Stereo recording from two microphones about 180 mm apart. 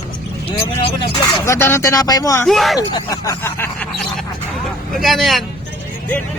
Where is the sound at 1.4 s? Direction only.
15° left (ahead or behind).